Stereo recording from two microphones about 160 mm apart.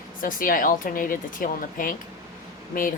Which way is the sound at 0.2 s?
60° left (ahead or behind).